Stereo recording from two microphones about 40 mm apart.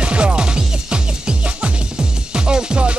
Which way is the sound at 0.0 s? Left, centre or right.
Right.